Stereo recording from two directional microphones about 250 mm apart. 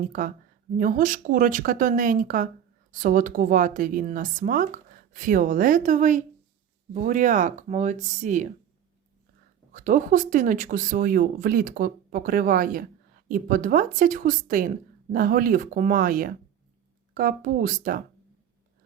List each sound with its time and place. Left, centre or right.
0.0 s speech: right
9.7 s speech: right